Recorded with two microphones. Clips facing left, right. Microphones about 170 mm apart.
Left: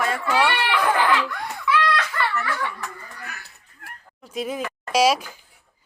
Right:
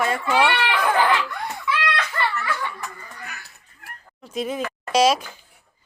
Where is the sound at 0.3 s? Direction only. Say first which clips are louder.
Right 1 dB; 20° right (ahead or behind).